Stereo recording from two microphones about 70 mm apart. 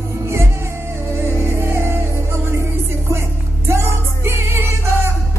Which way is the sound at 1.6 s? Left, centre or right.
Right.